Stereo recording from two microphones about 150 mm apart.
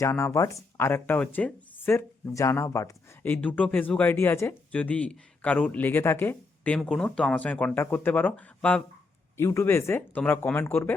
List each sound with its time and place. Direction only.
0.0 s speech: 20° left (ahead or behind)